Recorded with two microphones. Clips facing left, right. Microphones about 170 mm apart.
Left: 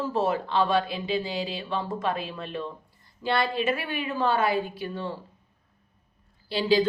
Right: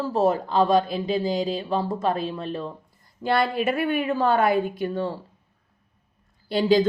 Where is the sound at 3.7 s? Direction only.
50° right (ahead or behind).